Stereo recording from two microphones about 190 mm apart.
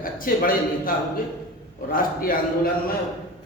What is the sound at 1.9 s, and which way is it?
Speech, 50° left (ahead or behind).